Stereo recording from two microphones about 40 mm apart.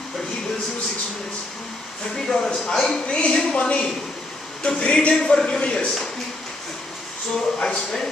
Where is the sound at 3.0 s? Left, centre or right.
Left.